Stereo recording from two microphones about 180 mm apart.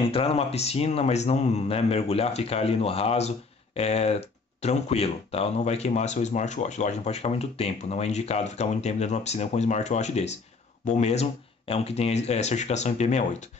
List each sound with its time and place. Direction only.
0.1 s speech: 35° left (ahead or behind)